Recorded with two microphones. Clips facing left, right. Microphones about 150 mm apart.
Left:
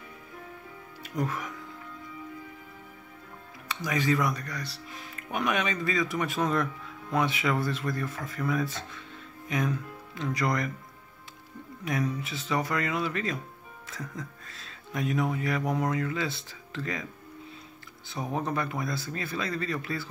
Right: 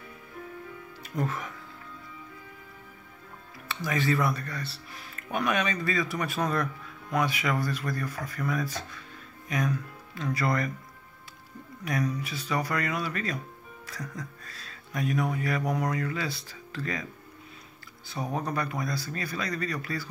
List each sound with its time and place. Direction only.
1.1 s speech: 15° left (ahead or behind)
3.6 s speech: 15° left (ahead or behind)
11.8 s speech: 20° left (ahead or behind)
18.0 s speech: 20° left (ahead or behind)